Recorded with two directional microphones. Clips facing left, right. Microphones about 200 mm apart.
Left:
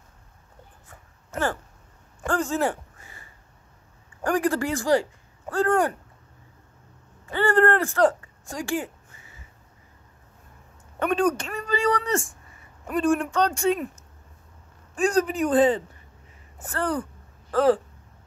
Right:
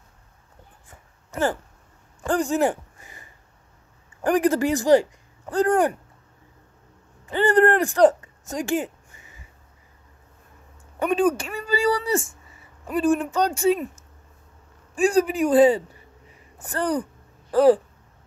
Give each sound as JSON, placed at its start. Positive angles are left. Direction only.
{"t": 1.3, "sound": "speech", "side_deg": -15}
{"t": 2.2, "sound": "a sound", "side_deg": -15}
{"t": 4.2, "sound": "speech", "side_deg": -20}
{"t": 7.2, "sound": "speech", "side_deg": -20}
{"t": 11.0, "sound": "speech", "side_deg": -5}
{"t": 16.5, "sound": "a sound", "side_deg": -15}